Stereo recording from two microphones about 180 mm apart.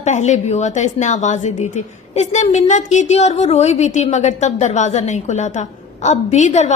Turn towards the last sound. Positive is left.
turn(degrees=40)  # may be behind; listen again after turning